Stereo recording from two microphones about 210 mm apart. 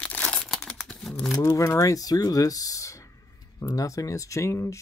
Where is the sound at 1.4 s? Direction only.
15° left (ahead or behind).